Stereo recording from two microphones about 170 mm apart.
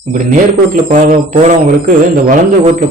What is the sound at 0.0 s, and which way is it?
A man's voice, 50° right (ahead or behind).